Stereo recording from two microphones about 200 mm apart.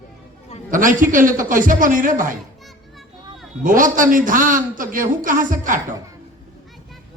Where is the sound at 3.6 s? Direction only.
40° right (ahead or behind).